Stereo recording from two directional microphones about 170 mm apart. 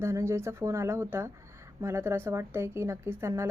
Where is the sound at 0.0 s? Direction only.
15° right (ahead or behind).